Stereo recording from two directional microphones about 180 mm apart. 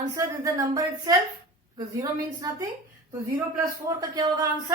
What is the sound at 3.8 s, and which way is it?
Speech, 20° right (ahead or behind).